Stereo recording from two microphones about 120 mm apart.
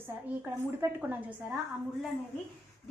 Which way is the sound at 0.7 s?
20° right (ahead or behind).